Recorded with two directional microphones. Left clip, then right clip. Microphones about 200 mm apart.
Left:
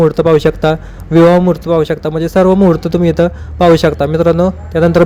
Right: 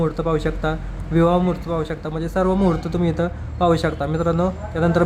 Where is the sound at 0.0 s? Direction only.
30° left (ahead or behind).